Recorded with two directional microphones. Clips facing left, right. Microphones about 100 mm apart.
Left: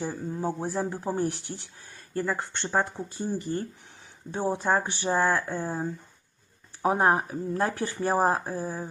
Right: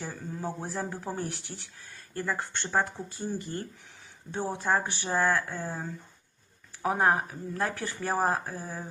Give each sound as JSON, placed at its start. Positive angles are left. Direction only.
{"t": 0.0, "sound": "speech", "side_deg": 20}